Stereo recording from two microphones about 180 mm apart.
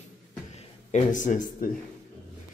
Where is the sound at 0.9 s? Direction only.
45° left (ahead or behind).